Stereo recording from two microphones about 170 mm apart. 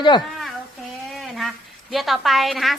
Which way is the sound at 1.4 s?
Centre (ahead or behind).